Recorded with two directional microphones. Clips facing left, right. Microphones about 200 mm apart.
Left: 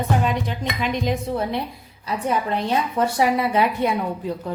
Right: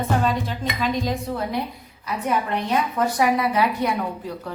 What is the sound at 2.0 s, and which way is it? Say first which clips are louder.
A woman's voice: left 1 dB; 30° left (ahead or behind).